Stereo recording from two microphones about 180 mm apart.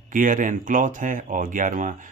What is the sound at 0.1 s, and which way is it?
Speech, 45° right (ahead or behind).